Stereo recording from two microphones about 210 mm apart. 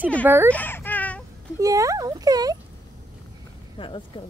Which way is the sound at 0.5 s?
10° left (ahead or behind).